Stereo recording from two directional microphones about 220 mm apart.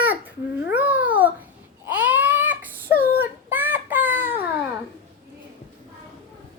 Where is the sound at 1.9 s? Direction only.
5° right (ahead or behind).